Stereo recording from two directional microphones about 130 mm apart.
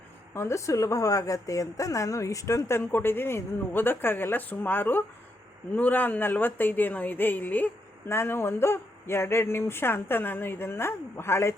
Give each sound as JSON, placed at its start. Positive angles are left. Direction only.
{"t": 0.3, "sound": "a woman's voice", "side_deg": 20}